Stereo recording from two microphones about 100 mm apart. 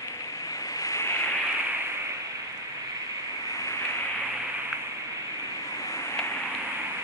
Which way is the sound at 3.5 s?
30° left (ahead or behind).